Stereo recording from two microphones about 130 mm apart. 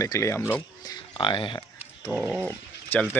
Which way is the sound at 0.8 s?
35° left (ahead or behind).